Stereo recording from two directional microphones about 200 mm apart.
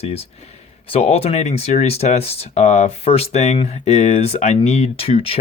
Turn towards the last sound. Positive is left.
turn(degrees=30)  # may be behind; listen again after turning